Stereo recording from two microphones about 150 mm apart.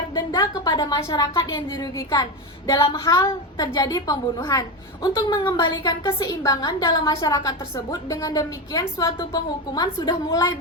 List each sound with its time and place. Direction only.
0.1 s a woman's voice: 30° left (ahead or behind)